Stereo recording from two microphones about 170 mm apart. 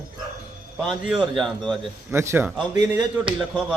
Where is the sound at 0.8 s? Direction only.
Centre (ahead or behind).